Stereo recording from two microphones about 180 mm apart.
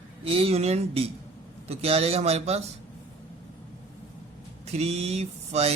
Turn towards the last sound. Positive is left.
turn(degrees=-35)  # may be behind; listen again after turning